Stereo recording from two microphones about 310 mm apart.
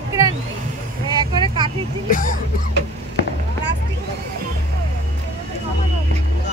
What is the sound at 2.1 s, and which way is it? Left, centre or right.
Music, left.